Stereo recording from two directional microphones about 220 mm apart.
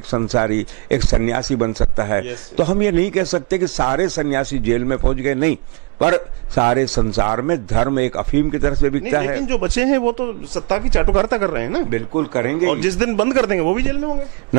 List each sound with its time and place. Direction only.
0.1 s a man's voice: 10° right (ahead or behind)
3.8 s a man's voice: 20° right (ahead or behind)